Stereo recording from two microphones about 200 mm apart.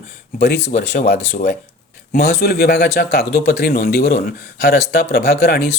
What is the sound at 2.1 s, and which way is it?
Speech, 50° left (ahead or behind).